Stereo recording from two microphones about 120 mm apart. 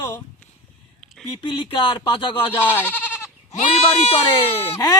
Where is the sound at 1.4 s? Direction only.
45° left (ahead or behind).